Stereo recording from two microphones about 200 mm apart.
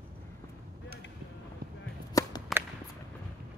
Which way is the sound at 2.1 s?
15° left (ahead or behind).